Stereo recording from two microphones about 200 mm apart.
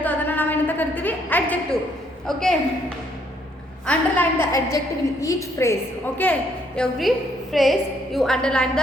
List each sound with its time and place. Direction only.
0.0 s a sound: 10° left (ahead or behind)
2.2 s a woman's voice: centre (ahead or behind)
3.8 s a woman's voice: 10° left (ahead or behind)